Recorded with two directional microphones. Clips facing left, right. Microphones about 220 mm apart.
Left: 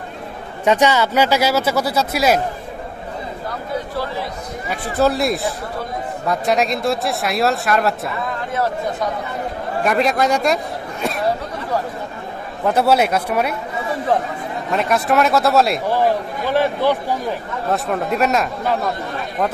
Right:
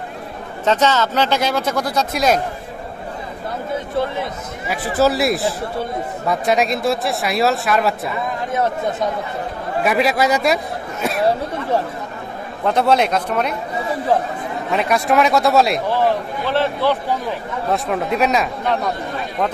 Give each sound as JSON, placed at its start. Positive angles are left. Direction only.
{"t": 0.7, "sound": "speech", "side_deg": 10}
{"t": 3.9, "sound": "speech", "side_deg": -20}
{"t": 4.6, "sound": "speech", "side_deg": -5}
{"t": 9.8, "sound": "a man's voice", "side_deg": -5}
{"t": 12.6, "sound": "speech", "side_deg": 5}
{"t": 14.7, "sound": "speech", "side_deg": 0}
{"t": 15.9, "sound": "speech", "side_deg": 10}
{"t": 17.6, "sound": "speech", "side_deg": 0}